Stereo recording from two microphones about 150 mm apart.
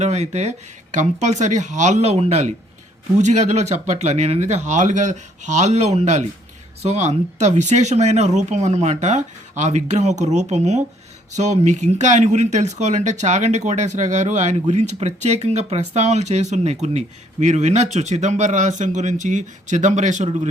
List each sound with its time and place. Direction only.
0.0 s speech: 50° right (ahead or behind)